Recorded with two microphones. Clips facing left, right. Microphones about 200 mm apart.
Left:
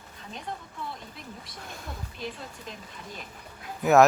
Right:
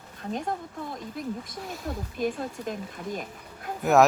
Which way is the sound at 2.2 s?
50° right (ahead or behind).